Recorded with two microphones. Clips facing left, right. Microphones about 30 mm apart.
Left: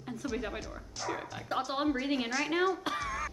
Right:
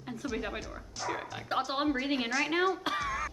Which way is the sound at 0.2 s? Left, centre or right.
Centre.